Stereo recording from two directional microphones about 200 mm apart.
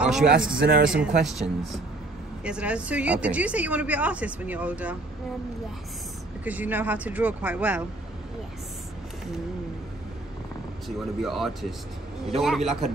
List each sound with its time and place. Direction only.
0.0 s a man's voice: 5° right (ahead or behind)
0.6 s speech: 45° right (ahead or behind)
0.8 s a man's voice: 5° right (ahead or behind)
6.4 s a woman's voice: 10° right (ahead or behind)
11.0 s a man's voice: centre (ahead or behind)